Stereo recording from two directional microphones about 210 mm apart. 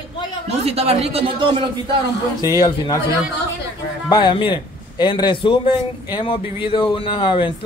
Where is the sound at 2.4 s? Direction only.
20° left (ahead or behind).